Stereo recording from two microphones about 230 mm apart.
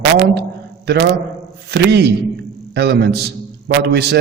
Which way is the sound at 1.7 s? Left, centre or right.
Right.